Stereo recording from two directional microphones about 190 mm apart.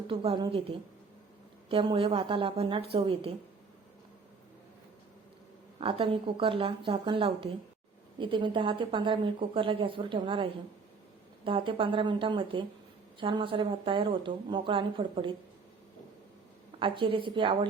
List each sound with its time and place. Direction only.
0.1 s a woman's voice: 30° right (ahead or behind)
1.7 s a woman's voice: 30° right (ahead or behind)
5.8 s a woman's voice: 30° right (ahead or behind)
16.8 s a woman's voice: 25° right (ahead or behind)